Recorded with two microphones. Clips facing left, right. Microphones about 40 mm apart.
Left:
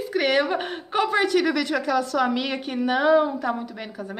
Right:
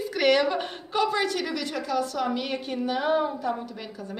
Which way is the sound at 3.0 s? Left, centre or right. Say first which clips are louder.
Left 7 dB; left.